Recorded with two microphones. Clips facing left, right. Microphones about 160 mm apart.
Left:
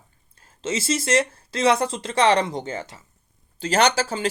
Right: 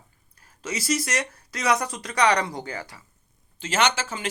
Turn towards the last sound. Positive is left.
turn(degrees=35)  # may be behind; listen again after turning